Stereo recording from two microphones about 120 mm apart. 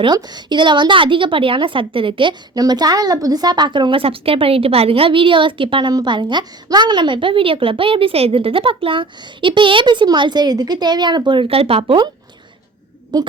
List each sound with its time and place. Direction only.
0.0 s a woman's voice: 35° right (ahead or behind)
13.1 s a woman's voice: 35° right (ahead or behind)